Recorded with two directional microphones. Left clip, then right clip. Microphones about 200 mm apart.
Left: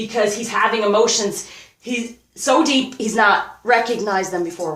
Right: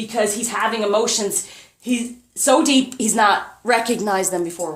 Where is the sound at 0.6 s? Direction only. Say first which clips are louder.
Left 4 dB; 45° right (ahead or behind).